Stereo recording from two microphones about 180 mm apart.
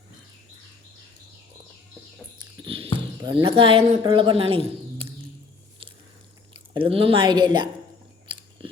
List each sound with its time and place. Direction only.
2.6 s a sound: 30° right (ahead or behind)
3.2 s speech: 30° right (ahead or behind)
6.5 s speech: 30° right (ahead or behind)
8.3 s biting: 25° right (ahead or behind)